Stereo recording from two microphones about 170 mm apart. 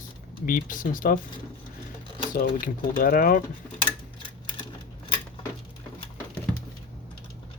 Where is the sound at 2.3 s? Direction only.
55° left (ahead or behind).